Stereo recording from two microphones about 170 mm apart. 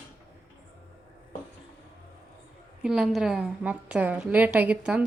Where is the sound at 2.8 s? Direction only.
5° right (ahead or behind).